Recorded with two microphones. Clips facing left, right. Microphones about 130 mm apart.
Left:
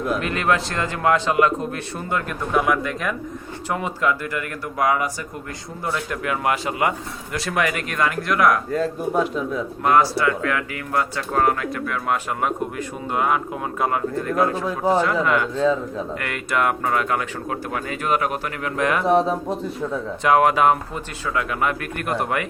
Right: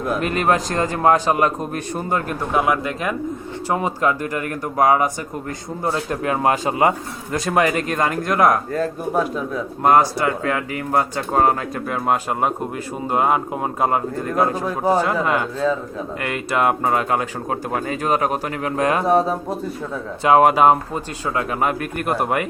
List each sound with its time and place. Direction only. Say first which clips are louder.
0.1 s speech: right 3 dB; 35° right (ahead or behind)
2.6 s speech: right 1 dB; 20° right (ahead or behind)
4.2 s speech: right 4 dB; 40° right (ahead or behind)
5.8 s speech: right 3 dB; 30° right (ahead or behind)
9.8 s speech: right 3 dB; 45° right (ahead or behind)
10.2 s speech: right 1 dB; 30° right (ahead or behind)
14.8 s speech: right 1 dB; 15° right (ahead or behind)
15.5 s a man's voice: left 1 dB; 5° right (ahead or behind)
16.2 s speech: right 3 dB; 25° right (ahead or behind)
19.2 s a man's voice: even; 5° right (ahead or behind)
20.2 s speech: right 3 dB; 35° right (ahead or behind)